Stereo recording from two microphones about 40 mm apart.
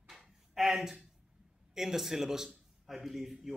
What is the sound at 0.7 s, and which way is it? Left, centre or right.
A man's voice, centre.